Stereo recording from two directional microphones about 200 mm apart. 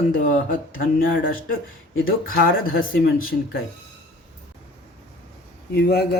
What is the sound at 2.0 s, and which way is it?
Speech, 45° left (ahead or behind).